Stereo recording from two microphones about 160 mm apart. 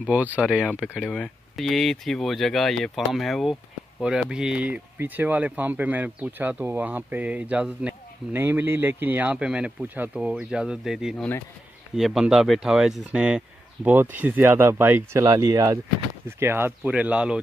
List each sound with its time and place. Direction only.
0.0 s speech: 10° right (ahead or behind)
1.0 s speech: 5° left (ahead or behind)